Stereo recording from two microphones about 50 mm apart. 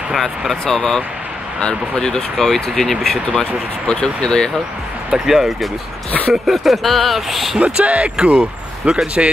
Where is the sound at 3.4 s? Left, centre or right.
Centre.